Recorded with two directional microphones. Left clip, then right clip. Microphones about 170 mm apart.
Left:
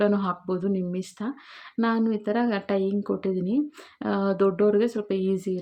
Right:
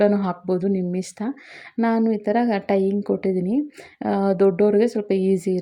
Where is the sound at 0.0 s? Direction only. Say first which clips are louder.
Right 5 dB; 20° right (ahead or behind).